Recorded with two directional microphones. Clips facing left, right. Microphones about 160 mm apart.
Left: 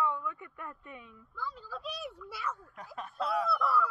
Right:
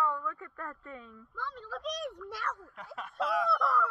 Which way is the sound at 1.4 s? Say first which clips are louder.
Right 2 dB; 5° left (ahead or behind).